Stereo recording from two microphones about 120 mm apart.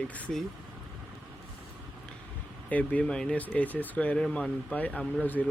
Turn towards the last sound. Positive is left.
turn(degrees=10)  # may be behind; listen again after turning